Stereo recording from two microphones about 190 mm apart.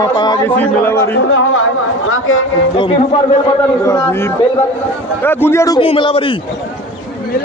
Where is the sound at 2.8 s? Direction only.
25° left (ahead or behind).